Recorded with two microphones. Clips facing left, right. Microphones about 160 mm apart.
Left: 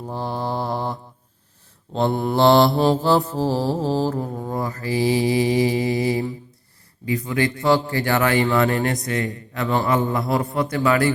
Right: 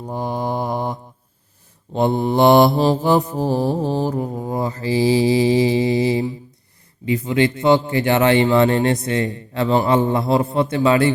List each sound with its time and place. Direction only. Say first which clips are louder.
0.0 s mantra: right 3 dB; 15° right (ahead or behind)
2.0 s mantra: right 3 dB; 20° right (ahead or behind)
2.7 s music: right 1 dB; 5° right (ahead or behind)
3.0 s speech: right 2 dB; 15° right (ahead or behind)